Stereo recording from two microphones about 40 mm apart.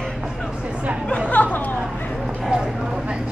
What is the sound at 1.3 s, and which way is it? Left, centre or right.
Chatter, left.